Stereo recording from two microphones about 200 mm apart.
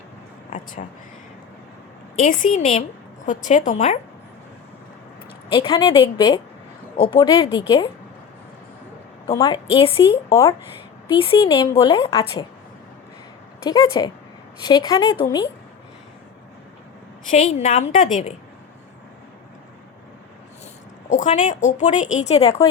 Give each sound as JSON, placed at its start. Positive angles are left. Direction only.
{"t": 0.8, "sound": "speech", "side_deg": 40}
{"t": 2.2, "sound": "speech", "side_deg": 40}
{"t": 5.5, "sound": "a woman's voice", "side_deg": 25}
{"t": 9.2, "sound": "speech", "side_deg": 15}
{"t": 9.7, "sound": "a woman's voice", "side_deg": 25}
{"t": 10.1, "sound": "speech", "side_deg": 15}
{"t": 11.1, "sound": "a woman's voice", "side_deg": 25}
{"t": 13.7, "sound": "a woman's voice", "side_deg": 20}
{"t": 17.2, "sound": "speech", "side_deg": 35}
{"t": 21.1, "sound": "speech", "side_deg": 40}